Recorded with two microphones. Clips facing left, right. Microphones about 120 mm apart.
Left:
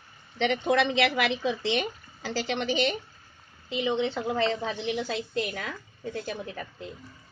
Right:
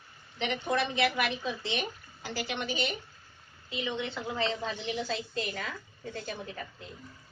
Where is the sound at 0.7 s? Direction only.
90° left.